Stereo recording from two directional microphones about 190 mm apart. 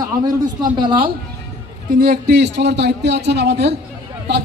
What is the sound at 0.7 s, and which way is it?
Speech, 25° right (ahead or behind).